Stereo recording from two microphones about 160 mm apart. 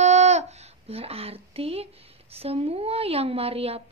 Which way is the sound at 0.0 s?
45° right (ahead or behind).